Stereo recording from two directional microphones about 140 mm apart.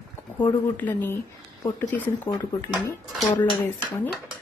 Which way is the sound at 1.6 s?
30° left (ahead or behind).